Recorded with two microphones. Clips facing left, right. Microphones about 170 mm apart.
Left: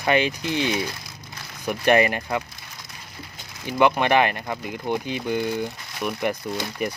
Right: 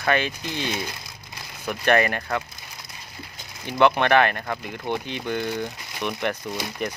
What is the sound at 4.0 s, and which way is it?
Speech, 10° left (ahead or behind).